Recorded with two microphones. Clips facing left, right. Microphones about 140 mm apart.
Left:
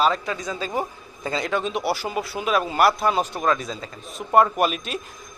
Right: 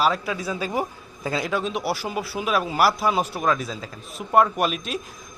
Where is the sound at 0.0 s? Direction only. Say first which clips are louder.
Left 1 dB; 5° right (ahead or behind).